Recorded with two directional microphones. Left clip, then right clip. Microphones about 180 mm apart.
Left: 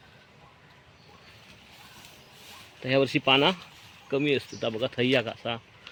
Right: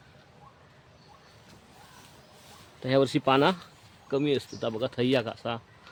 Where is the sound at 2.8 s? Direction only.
10° right (ahead or behind).